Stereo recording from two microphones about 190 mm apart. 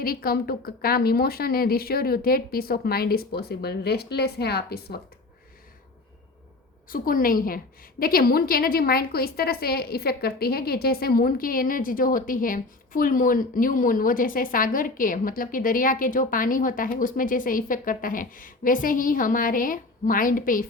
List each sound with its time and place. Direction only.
0.0 s a woman's voice: 50° left (ahead or behind)
6.8 s a woman's voice: 45° left (ahead or behind)